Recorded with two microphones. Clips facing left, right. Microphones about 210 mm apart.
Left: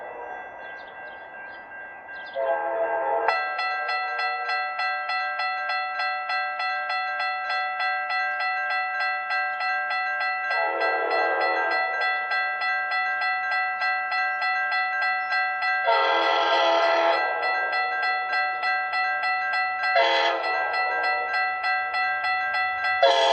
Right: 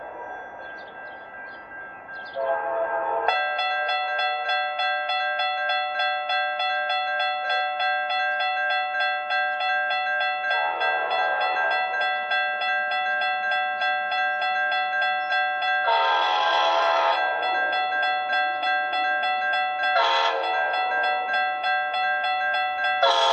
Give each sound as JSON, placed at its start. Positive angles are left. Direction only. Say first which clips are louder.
{"t": 11.7, "sound": "music", "louder": "right 2 dB", "side_deg": -35}
{"t": 14.4, "sound": "a sound", "louder": "right 3 dB", "side_deg": -35}
{"t": 15.9, "sound": "train", "louder": "left 4 dB", "side_deg": 15}
{"t": 17.5, "sound": "music", "louder": "right 3 dB", "side_deg": -35}
{"t": 19.2, "sound": "zither", "louder": "right 3 dB", "side_deg": -35}
{"t": 19.9, "sound": "train", "louder": "left 4 dB", "side_deg": 20}
{"t": 20.7, "sound": "a sound", "louder": "right 2 dB", "side_deg": -35}
{"t": 21.9, "sound": "wind chime", "louder": "right 3 dB", "side_deg": -35}
{"t": 22.9, "sound": "train", "louder": "left 4 dB", "side_deg": 20}